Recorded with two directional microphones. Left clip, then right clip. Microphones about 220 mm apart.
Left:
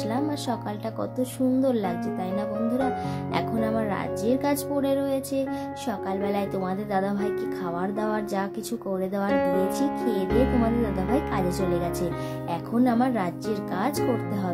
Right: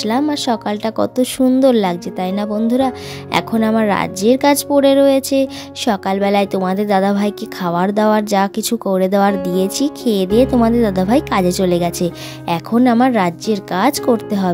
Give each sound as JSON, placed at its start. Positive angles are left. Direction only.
{"t": 0.0, "sound": "speech", "side_deg": -40}